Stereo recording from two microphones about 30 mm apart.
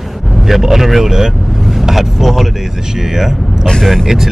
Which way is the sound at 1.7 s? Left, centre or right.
Centre.